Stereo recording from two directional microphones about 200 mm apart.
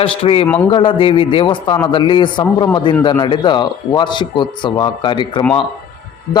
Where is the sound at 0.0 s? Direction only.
30° left (ahead or behind).